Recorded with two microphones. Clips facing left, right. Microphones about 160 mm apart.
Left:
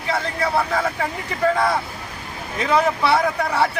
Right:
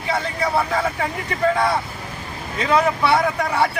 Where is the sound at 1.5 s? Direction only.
Centre (ahead or behind).